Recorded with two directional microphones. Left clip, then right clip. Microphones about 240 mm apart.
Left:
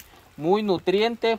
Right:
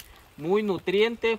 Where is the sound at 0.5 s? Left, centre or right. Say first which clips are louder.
Left 2 dB; left.